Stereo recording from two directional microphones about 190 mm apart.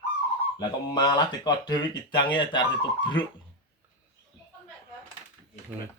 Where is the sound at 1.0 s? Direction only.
20° left (ahead or behind).